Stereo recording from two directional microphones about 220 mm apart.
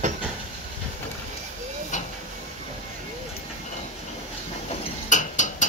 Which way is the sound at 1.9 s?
35° left (ahead or behind).